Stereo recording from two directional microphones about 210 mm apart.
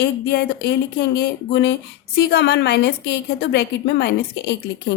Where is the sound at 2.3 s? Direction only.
55° left (ahead or behind).